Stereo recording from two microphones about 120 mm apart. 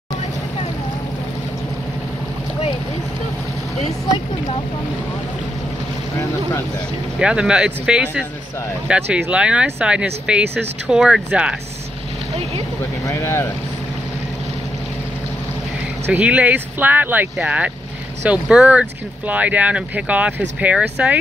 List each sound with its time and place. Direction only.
7.2 s speech: 5° right (ahead or behind)
13.0 s speech: 25° left (ahead or behind)
16.1 s speech: 10° right (ahead or behind)